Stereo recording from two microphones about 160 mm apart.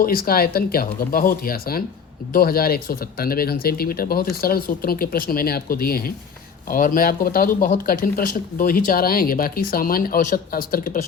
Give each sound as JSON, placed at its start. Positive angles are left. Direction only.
{"t": 0.0, "sound": "speech", "side_deg": 65}